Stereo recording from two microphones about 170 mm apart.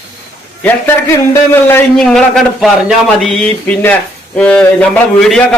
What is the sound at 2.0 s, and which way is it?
A man's voice, 5° left (ahead or behind).